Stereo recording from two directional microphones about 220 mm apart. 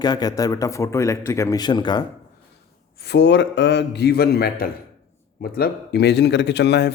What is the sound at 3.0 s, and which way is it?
Speech, 50° left (ahead or behind).